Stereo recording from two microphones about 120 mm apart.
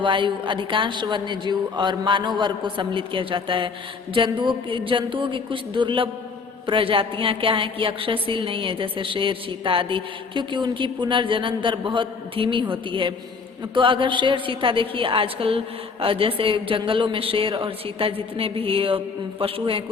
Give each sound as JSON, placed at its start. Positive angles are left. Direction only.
{"t": 0.0, "sound": "a woman's voice", "side_deg": -45}